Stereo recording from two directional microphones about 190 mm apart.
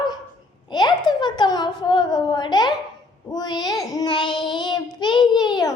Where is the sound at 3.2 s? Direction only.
20° left (ahead or behind).